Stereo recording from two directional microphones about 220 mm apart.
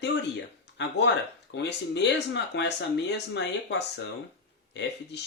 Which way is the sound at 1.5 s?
50° left (ahead or behind).